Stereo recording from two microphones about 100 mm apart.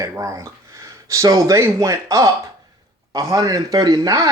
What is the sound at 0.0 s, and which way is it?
Speech, 30° right (ahead or behind).